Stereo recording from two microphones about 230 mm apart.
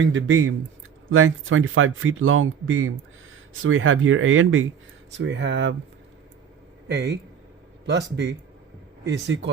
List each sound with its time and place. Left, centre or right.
0.0 s speech: right
6.8 s speech: right